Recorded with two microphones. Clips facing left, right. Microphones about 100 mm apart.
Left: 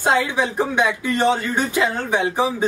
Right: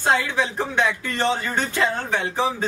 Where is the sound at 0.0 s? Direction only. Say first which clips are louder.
Left 2 dB; 15° left (ahead or behind).